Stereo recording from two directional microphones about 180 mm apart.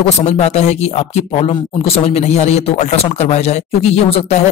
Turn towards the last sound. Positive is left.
turn(degrees=35)  # may be behind; listen again after turning